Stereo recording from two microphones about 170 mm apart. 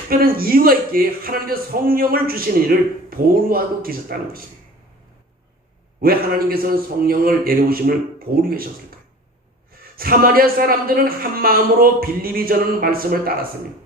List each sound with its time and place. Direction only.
0.1 s a man's voice: 60° right (ahead or behind)
6.0 s a man's voice: 60° right (ahead or behind)
9.7 s a man's voice: 60° right (ahead or behind)